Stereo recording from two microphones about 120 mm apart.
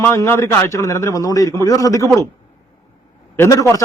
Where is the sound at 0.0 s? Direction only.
20° left (ahead or behind).